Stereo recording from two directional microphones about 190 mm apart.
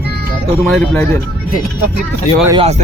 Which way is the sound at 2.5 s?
30° right (ahead or behind).